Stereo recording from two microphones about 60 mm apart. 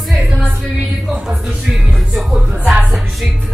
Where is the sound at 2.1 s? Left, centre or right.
Centre.